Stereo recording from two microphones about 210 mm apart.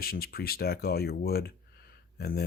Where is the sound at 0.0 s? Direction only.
45° left (ahead or behind).